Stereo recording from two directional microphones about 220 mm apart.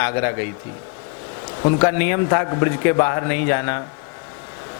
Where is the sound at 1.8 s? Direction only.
15° left (ahead or behind).